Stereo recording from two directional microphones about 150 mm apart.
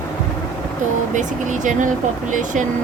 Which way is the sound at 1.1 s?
55° right (ahead or behind).